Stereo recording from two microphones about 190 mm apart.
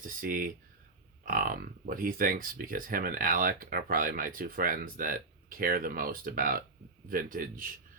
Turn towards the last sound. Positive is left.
turn(degrees=-45)  # may be behind; listen again after turning